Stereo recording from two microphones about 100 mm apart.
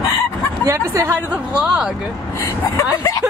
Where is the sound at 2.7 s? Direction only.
30° left (ahead or behind).